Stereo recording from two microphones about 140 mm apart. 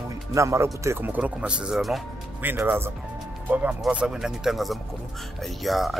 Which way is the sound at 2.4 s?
15° right (ahead or behind).